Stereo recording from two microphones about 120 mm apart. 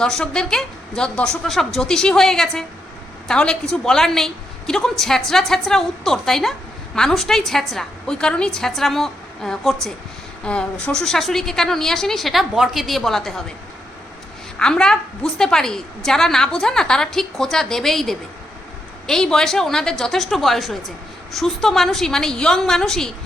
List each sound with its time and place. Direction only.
0.0 s a woman's voice: 5° left (ahead or behind)
14.6 s a woman's voice: 5° left (ahead or behind)